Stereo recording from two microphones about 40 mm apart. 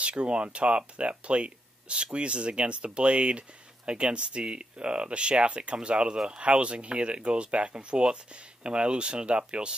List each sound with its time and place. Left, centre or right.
0.1 s speech: right